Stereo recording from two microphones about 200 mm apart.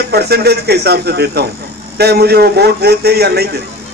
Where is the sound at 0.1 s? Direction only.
50° right (ahead or behind).